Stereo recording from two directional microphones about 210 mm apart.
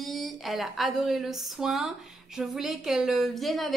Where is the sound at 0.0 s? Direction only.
Centre (ahead or behind).